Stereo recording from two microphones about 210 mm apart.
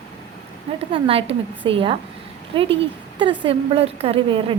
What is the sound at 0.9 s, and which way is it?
A woman's voice, 25° right (ahead or behind).